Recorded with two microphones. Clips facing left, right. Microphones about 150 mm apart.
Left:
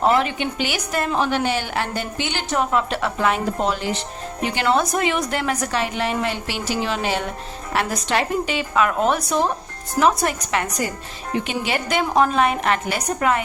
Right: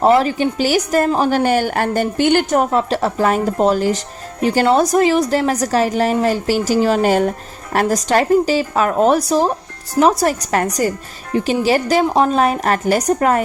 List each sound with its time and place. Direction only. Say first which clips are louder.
0.0 s a woman's voice: right 6 dB; 35° right (ahead or behind)